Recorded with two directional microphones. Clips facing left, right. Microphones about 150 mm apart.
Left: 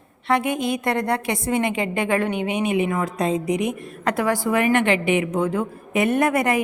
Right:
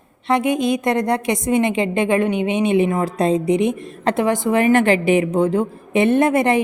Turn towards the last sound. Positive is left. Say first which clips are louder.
# right 4 dB
turn(degrees=-25)  # may be behind; listen again after turning